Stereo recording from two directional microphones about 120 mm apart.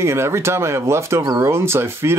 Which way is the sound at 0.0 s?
20° right (ahead or behind).